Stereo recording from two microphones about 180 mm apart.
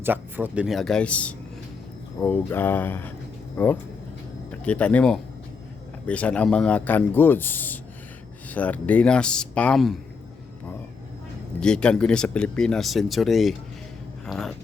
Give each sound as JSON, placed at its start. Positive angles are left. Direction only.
{"t": 0.0, "sound": "speech", "side_deg": -10}
{"t": 11.6, "sound": "speech", "side_deg": 5}